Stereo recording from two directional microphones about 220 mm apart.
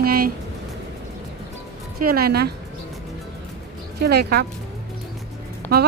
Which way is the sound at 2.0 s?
45° right (ahead or behind).